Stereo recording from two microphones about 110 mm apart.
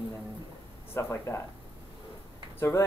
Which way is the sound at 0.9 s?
25° left (ahead or behind).